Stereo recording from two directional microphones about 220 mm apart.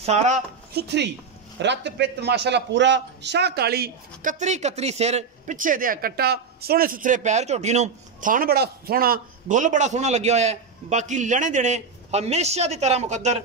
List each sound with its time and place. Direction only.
0.0 s a man's voice: 30° right (ahead or behind)
0.7 s a man's voice: 50° right (ahead or behind); by 13.4 s 30° right (ahead or behind)